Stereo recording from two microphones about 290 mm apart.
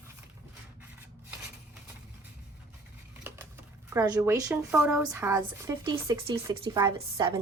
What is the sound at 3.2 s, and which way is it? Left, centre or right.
Speech, centre.